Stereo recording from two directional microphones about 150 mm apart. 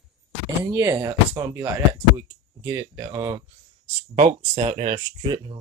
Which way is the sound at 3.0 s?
25° right (ahead or behind).